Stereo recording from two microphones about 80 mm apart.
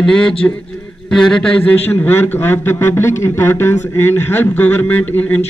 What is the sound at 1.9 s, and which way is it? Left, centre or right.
A man's voice, left.